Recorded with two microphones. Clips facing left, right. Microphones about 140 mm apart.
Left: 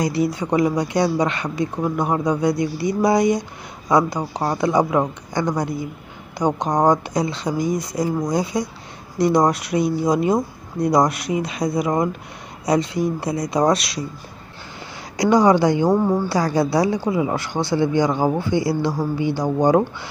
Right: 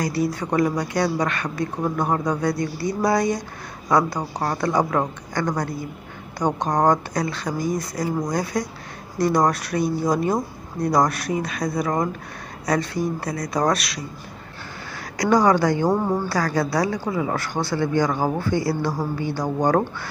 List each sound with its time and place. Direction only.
0.0 s speech: 20° left (ahead or behind)
15.1 s speech: 20° left (ahead or behind)